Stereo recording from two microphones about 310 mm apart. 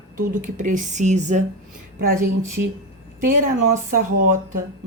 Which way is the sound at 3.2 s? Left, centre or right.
Right.